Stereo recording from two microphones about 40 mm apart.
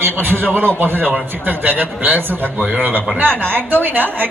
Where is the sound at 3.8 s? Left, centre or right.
Right.